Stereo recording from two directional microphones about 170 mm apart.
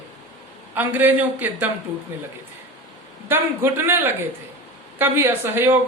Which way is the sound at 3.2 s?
15° right (ahead or behind).